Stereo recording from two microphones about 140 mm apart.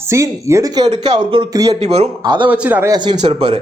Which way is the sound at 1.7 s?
50° right (ahead or behind).